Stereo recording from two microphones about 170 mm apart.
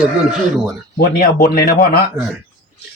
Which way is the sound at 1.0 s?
60° left (ahead or behind).